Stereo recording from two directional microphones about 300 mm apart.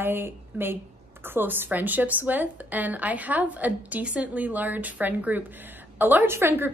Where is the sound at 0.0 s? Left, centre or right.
Centre.